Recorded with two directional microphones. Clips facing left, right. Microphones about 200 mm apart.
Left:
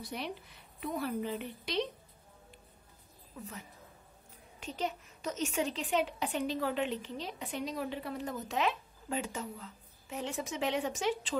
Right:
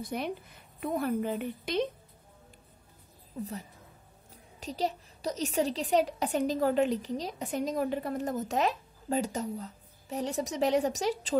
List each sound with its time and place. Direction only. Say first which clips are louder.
0.0 s a woman's voice: right 6 dB; 50° right (ahead or behind)
4.6 s a woman's voice: right 4 dB; 35° right (ahead or behind)